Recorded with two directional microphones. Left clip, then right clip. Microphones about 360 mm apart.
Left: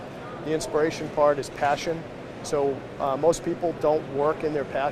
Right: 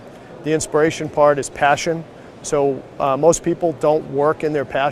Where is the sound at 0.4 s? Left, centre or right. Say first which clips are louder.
Right 8 dB; right.